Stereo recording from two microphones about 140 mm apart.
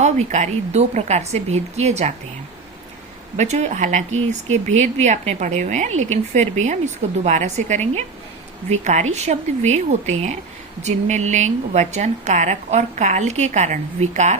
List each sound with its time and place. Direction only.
0.0 s a woman's voice: 55° right (ahead or behind)
3.3 s a woman's voice: 55° right (ahead or behind)